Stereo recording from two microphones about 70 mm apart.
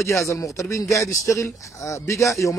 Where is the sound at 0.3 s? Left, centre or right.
Left.